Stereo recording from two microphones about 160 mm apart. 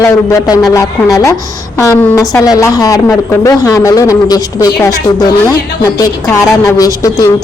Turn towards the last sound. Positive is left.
turn(degrees=20)  # may be behind; listen again after turning